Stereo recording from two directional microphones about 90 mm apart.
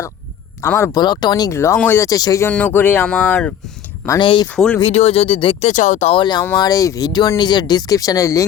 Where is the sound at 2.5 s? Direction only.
20° left (ahead or behind).